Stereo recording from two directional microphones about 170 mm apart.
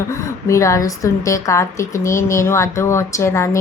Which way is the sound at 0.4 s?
15° left (ahead or behind).